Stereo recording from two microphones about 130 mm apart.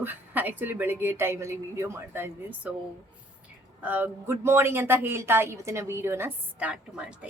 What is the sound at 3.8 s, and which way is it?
Speech, 15° right (ahead or behind).